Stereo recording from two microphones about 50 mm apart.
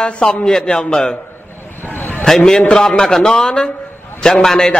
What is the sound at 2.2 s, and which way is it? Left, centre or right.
A man's voice, centre.